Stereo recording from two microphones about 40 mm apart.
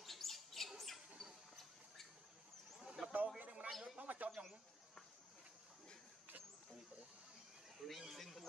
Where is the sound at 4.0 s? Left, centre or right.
Right.